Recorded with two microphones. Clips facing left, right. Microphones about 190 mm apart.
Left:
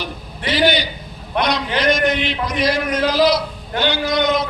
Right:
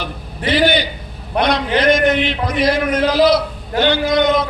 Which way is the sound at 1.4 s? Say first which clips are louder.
Right 3 dB; 55° right (ahead or behind).